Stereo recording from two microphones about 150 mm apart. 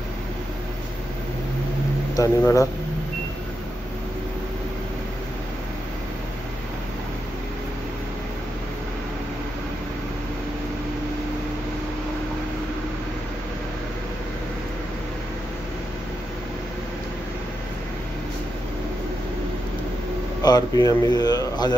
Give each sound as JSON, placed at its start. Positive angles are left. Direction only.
{"t": 2.1, "sound": "speech", "side_deg": 20}
{"t": 20.4, "sound": "speech", "side_deg": 25}